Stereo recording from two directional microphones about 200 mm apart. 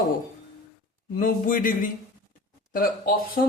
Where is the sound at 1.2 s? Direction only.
40° left (ahead or behind).